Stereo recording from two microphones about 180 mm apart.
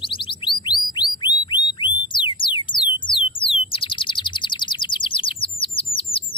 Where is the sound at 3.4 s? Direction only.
30° left (ahead or behind).